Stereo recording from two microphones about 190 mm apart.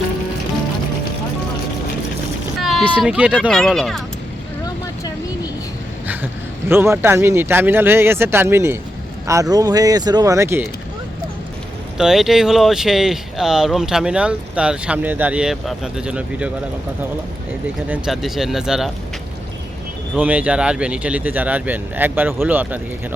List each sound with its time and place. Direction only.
2.6 s speech: centre (ahead or behind)
6.7 s speech: 10° right (ahead or behind)
11.9 s speech: centre (ahead or behind)
17.8 s speech: 5° right (ahead or behind)
20.1 s speech: 10° right (ahead or behind)